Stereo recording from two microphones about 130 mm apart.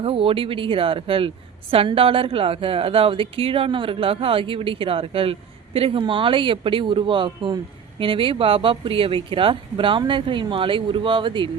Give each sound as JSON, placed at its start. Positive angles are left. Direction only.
{"t": 0.0, "sound": "a woman's voice", "side_deg": -45}